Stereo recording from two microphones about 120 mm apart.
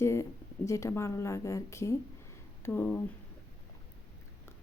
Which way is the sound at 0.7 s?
25° left (ahead or behind).